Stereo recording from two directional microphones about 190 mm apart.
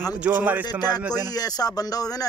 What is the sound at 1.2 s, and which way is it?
Speech, 20° left (ahead or behind).